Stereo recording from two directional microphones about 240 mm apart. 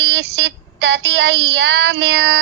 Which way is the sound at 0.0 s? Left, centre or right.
Right.